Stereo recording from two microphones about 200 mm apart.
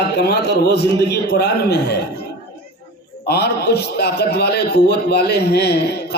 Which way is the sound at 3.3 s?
55° left (ahead or behind).